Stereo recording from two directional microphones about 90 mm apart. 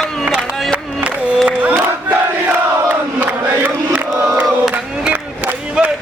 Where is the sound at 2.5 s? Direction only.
20° right (ahead or behind).